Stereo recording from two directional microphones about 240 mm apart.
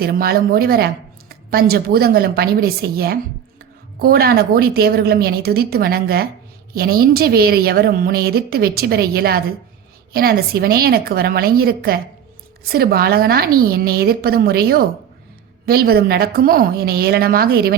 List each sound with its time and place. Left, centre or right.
0.0 s a woman's voice: right